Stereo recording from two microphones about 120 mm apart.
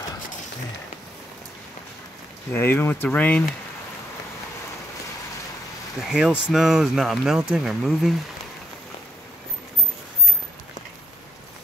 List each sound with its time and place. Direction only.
2.5 s speech: 15° left (ahead or behind)
5.9 s speech: 5° right (ahead or behind)